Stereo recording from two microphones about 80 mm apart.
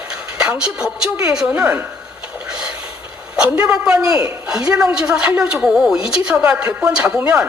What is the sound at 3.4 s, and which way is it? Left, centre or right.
A woman's voice, centre.